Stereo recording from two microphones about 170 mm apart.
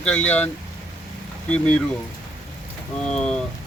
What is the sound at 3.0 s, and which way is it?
Speech, 5° left (ahead or behind).